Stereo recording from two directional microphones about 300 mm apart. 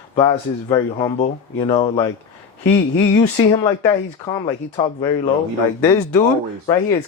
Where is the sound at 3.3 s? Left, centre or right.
Centre.